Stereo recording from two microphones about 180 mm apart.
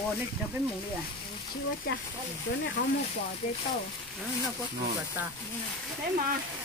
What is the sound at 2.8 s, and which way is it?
Speech, 50° left (ahead or behind).